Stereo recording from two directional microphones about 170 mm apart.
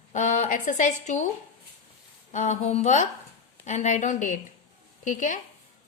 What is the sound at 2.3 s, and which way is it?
A woman's voice, 45° left (ahead or behind).